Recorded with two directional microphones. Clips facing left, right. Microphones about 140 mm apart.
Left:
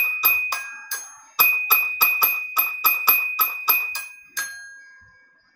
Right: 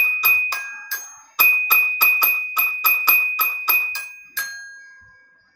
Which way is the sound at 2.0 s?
5° left (ahead or behind).